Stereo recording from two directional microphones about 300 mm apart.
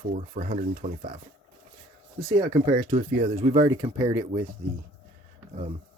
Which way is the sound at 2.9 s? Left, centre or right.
Centre.